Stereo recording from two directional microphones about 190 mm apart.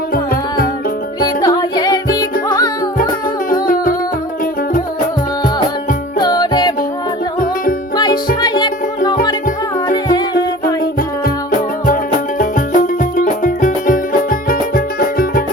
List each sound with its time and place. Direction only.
0.1 s music: 50° left (ahead or behind)
1.4 s music: 20° left (ahead or behind)
3.5 s music: 45° left (ahead or behind)
6.1 s music: 20° left (ahead or behind)
7.3 s music: 45° left (ahead or behind)
7.9 s music: 20° left (ahead or behind)
9.9 s music: 20° left (ahead or behind)
12.4 s music: 45° left (ahead or behind)